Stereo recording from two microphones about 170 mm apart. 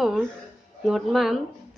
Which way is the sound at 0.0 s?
5° left (ahead or behind).